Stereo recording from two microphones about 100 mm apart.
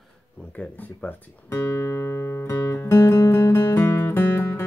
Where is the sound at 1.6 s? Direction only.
30° left (ahead or behind).